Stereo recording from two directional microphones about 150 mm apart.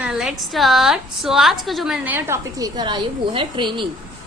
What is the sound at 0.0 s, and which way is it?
A woman's voice, 5° right (ahead or behind).